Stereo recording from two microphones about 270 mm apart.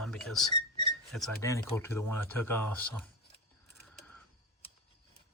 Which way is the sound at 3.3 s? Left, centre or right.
Left.